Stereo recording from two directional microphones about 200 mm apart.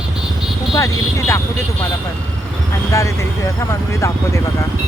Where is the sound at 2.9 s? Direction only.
15° left (ahead or behind).